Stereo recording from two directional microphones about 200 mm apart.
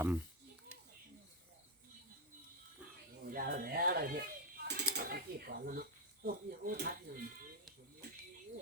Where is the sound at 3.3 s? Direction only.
45° right (ahead or behind).